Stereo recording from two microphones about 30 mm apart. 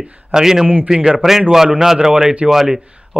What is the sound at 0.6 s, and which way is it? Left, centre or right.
Speech, right.